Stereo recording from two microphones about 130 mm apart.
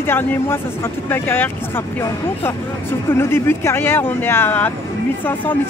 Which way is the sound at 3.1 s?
20° left (ahead or behind).